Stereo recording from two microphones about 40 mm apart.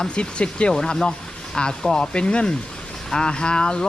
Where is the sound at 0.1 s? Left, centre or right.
Left.